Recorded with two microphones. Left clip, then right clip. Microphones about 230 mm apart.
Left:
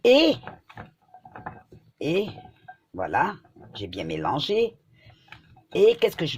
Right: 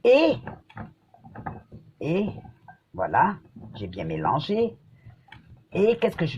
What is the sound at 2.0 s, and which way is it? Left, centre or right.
Speech, left.